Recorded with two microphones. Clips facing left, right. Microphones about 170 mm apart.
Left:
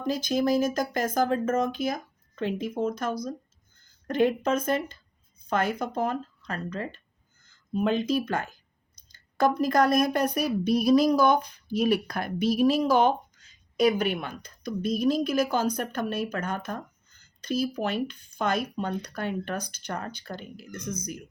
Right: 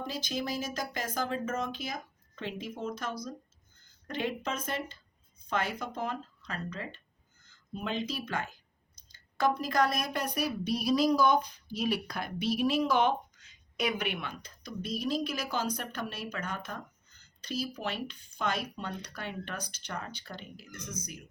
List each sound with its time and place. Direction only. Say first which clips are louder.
0.1 s speech: left 13 dB; 45° left (ahead or behind)